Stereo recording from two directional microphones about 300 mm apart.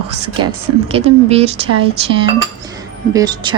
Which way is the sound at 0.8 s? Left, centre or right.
Centre.